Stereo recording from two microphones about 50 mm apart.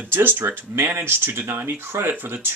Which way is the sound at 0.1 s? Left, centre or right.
Right.